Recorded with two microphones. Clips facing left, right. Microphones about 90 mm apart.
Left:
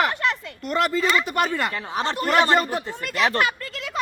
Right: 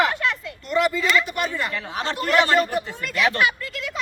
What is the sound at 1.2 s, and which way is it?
Speech, 50° left (ahead or behind).